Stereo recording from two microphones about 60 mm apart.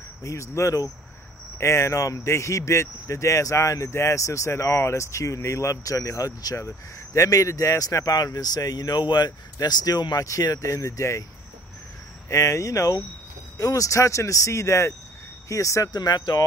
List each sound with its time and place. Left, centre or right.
0.2 s speech: left
1.6 s speech: left
7.2 s speech: left
12.3 s speech: left